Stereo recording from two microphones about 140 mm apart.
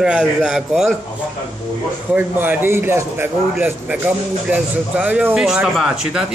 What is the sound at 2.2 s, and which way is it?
A man's voice, 15° right (ahead or behind).